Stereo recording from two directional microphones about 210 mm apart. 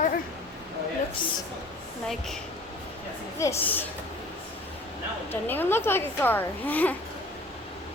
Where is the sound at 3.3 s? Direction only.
15° left (ahead or behind).